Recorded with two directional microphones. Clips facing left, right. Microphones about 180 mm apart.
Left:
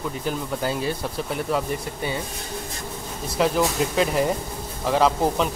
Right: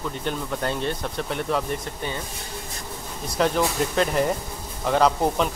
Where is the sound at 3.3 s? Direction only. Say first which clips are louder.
Left 1 dB; 5° left (ahead or behind).